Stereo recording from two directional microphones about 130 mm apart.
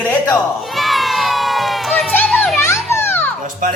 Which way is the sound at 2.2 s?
Centre (ahead or behind).